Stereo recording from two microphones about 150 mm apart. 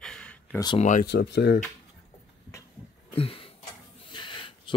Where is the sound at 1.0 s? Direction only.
90° left.